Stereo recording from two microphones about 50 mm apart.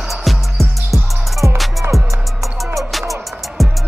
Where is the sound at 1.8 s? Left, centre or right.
Right.